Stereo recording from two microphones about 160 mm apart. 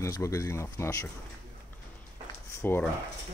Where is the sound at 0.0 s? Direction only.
20° left (ahead or behind).